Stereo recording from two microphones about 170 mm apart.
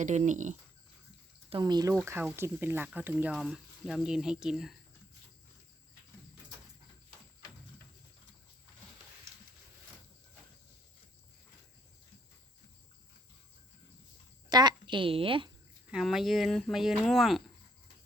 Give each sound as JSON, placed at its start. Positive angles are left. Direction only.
{"t": 0.0, "sound": "speech", "side_deg": -45}
{"t": 1.5, "sound": "speech", "side_deg": -25}
{"t": 14.5, "sound": "a woman's voice", "side_deg": -25}
{"t": 15.9, "sound": "speech", "side_deg": 0}